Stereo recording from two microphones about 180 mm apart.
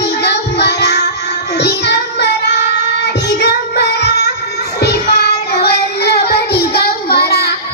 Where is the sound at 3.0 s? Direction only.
70° left (ahead or behind).